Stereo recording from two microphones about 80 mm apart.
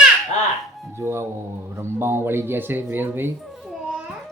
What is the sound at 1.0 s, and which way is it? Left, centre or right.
Speech, right.